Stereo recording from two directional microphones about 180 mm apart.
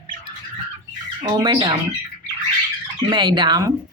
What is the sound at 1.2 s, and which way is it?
Speech, 25° right (ahead or behind).